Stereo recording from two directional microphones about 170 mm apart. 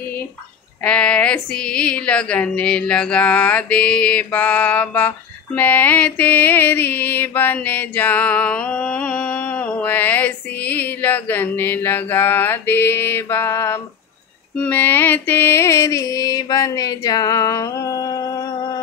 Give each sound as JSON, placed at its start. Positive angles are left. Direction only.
{"t": 0.8, "sound": "speech", "side_deg": 5}
{"t": 14.6, "sound": "music", "side_deg": 10}